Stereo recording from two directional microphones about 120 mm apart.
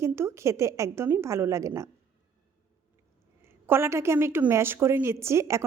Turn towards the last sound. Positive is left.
turn(degrees=-25)  # may be behind; listen again after turning